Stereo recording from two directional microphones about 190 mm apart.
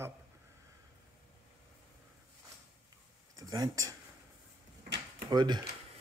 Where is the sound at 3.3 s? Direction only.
20° right (ahead or behind).